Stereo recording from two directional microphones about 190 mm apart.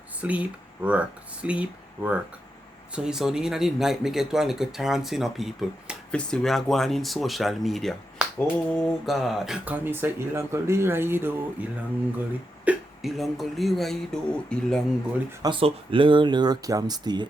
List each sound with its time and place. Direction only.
0.2 s speech: 5° right (ahead or behind)
12.6 s speech: centre (ahead or behind)
15.4 s speech: 25° right (ahead or behind)